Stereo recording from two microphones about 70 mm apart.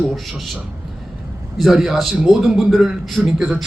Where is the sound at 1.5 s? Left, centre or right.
Centre.